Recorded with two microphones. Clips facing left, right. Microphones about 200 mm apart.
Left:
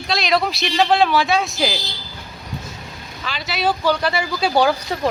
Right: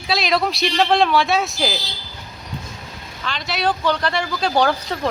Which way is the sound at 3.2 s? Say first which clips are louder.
Even; 5° left (ahead or behind).